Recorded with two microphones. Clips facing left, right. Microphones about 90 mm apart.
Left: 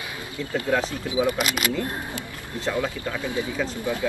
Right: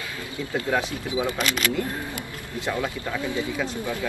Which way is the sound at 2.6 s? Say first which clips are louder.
Left 1 dB; 20° right (ahead or behind).